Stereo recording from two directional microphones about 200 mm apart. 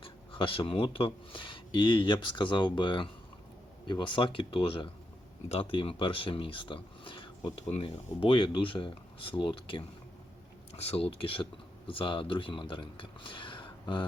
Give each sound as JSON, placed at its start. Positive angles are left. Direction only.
{"t": 0.0, "sound": "speech", "side_deg": 25}